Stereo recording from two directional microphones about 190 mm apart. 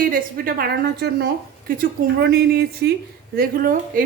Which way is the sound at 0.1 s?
50° right (ahead or behind).